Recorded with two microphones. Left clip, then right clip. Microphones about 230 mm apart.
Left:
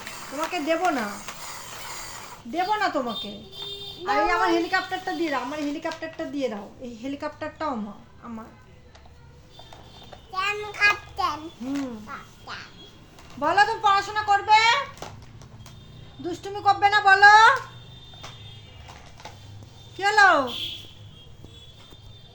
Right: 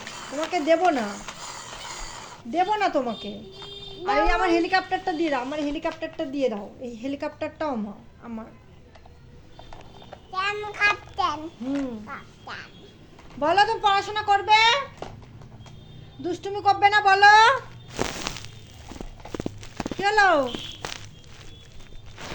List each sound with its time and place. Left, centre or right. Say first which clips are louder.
0.0 s a sound: even; centre
2.5 s a woman's voice: right 2 dB; centre
10.1 s a child's voice: even; centre
13.4 s a woman's voice: even; left
15.0 s horse: right 1 dB; centre
16.2 s a woman's voice: even; centre
20.0 s a woman's voice: left 2 dB; left